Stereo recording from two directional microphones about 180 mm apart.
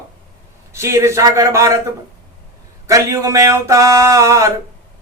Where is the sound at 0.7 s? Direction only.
15° right (ahead or behind).